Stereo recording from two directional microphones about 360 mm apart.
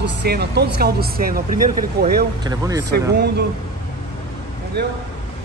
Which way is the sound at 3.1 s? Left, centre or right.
Right.